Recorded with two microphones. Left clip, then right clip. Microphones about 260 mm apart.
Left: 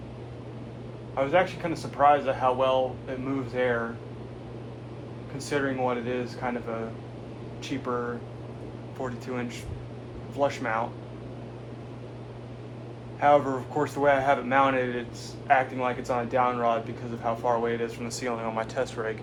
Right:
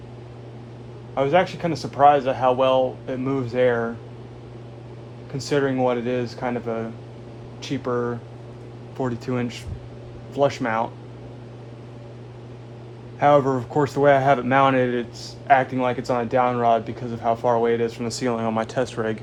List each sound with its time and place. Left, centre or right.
1.1 s a man's voice: right
5.4 s a man's voice: right
9.0 s a man's voice: right
13.1 s a man's voice: right